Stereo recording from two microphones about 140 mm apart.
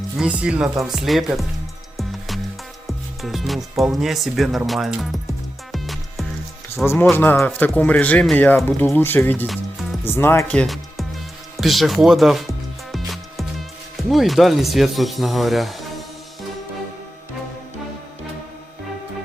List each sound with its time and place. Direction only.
0.2 s speech: 10° right (ahead or behind)
2.0 s music: centre (ahead or behind)
2.8 s speech: centre (ahead or behind)
5.7 s music: centre (ahead or behind)
6.8 s speech: 15° left (ahead or behind)
11.5 s music: centre (ahead or behind)